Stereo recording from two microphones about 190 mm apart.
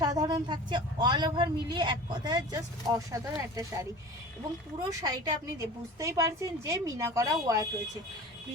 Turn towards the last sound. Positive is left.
turn(degrees=-20)  # may be behind; listen again after turning